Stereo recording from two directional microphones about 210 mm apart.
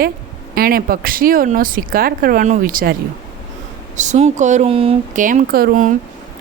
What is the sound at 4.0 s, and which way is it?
Speech, 35° right (ahead or behind).